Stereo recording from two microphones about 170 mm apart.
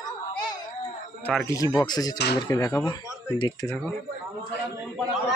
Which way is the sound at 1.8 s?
20° left (ahead or behind).